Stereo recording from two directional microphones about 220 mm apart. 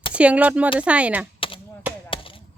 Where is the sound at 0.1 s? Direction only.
5° right (ahead or behind).